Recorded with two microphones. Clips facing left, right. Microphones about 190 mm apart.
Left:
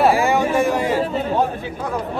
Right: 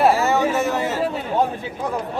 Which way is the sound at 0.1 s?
15° left (ahead or behind).